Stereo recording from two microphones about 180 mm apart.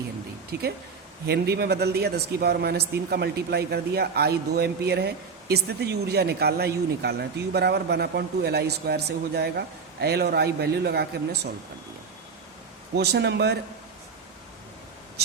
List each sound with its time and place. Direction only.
0.5 s speech: 65° right (ahead or behind)
13.0 s speech: 65° right (ahead or behind)